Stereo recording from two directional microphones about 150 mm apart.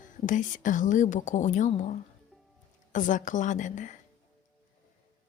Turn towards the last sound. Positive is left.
turn(degrees=55)  # may be behind; listen again after turning